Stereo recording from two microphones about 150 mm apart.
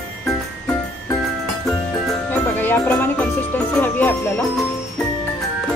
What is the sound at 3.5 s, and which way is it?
Speech, 10° left (ahead or behind).